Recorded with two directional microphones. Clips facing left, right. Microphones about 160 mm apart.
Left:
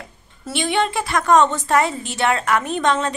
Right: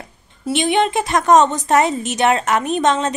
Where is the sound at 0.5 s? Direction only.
20° right (ahead or behind).